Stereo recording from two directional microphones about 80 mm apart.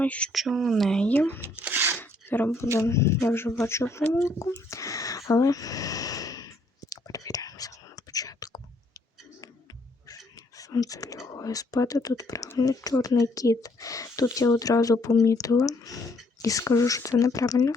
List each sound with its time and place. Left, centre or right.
0.0 s speech: centre
0.3 s speech: centre
1.0 s speech: left
1.6 s a sound: right
2.0 s a sound: left
2.7 s speech: left
6.9 s whispering: left
10.6 s speech: left